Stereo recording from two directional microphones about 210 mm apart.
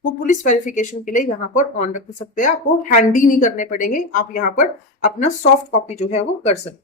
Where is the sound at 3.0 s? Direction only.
35° left (ahead or behind).